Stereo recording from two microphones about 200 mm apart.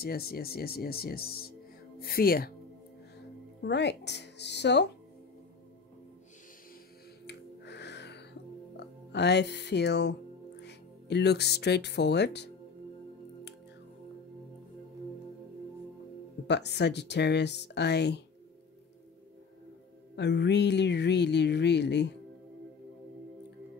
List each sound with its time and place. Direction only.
0.0 s speech: 50° left (ahead or behind)
3.6 s speech: 60° left (ahead or behind)
7.2 s music: 55° left (ahead or behind)
8.7 s speech: 55° left (ahead or behind)
16.4 s speech: 60° left (ahead or behind)
20.2 s speech: 60° left (ahead or behind)